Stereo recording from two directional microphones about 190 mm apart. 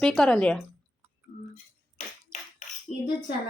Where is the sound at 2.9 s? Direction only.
35° left (ahead or behind).